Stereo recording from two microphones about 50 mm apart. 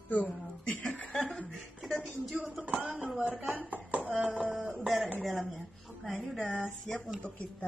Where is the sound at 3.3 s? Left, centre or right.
Right.